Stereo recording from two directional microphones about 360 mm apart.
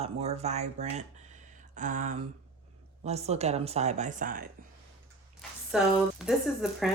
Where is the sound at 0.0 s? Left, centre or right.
Centre.